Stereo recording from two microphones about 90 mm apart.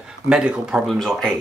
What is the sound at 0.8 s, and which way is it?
Speech, 5° left (ahead or behind).